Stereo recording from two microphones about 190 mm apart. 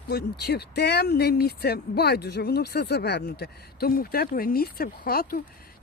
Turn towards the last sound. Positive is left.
turn(degrees=50)  # may be behind; listen again after turning